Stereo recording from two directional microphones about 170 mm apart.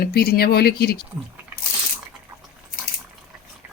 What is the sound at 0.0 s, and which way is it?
Speech, 65° left (ahead or behind).